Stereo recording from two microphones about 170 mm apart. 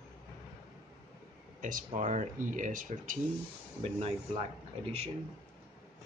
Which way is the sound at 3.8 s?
40° right (ahead or behind).